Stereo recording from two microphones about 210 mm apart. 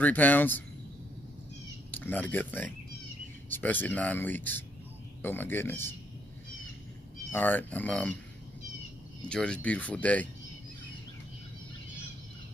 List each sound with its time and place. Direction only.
0.0 s speech: 10° left (ahead or behind)
1.9 s speech: 10° left (ahead or behind)
7.3 s speech: 10° left (ahead or behind)
9.3 s speech: 5° left (ahead or behind)